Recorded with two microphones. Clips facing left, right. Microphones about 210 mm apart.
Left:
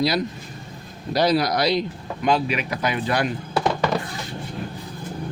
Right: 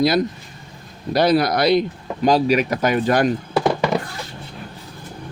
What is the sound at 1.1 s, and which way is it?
Speech, 55° right (ahead or behind).